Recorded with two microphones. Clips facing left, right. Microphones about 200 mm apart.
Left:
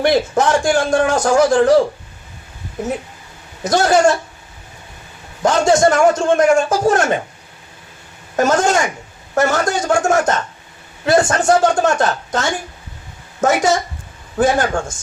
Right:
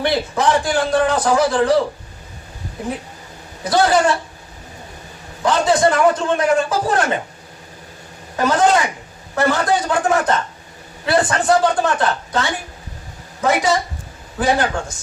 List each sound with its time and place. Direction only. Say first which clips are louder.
0.0 s a man's voice: left 4 dB; 45° left (ahead or behind)
3.6 s a man's voice: left 2 dB; 45° left (ahead or behind)
5.4 s a man's voice: left 3 dB; 45° left (ahead or behind)
8.4 s a man's voice: left 1 dB; 45° left (ahead or behind)